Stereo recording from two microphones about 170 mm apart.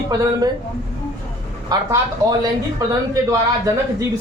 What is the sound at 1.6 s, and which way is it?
Speech, 25° right (ahead or behind).